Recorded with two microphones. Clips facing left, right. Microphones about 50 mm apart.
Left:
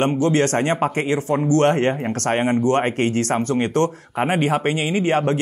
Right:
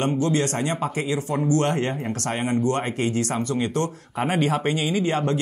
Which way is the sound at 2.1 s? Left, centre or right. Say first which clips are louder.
Left 5 dB; left.